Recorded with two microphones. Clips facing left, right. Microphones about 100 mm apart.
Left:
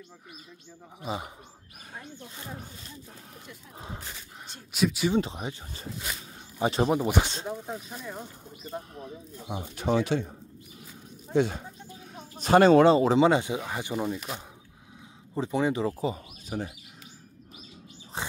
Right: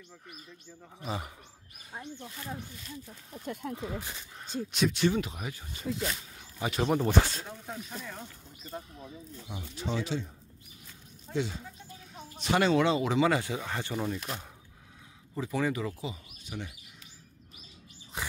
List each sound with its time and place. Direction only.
1.0 s speech: 20° left (ahead or behind)
2.3 s speech: 25° left (ahead or behind)
4.7 s speech: 5° left (ahead or behind)
5.1 s speech: 30° left (ahead or behind)
6.9 s speech: 15° left (ahead or behind)
8.9 s speech: 55° left (ahead or behind)
11.3 s speech: 55° left (ahead or behind)
12.1 s speech: 40° left (ahead or behind); by 14.4 s 5° left (ahead or behind)
15.3 s speech: 25° left (ahead or behind)
15.8 s speech: 40° left (ahead or behind)
18.2 s chirp: 30° left (ahead or behind)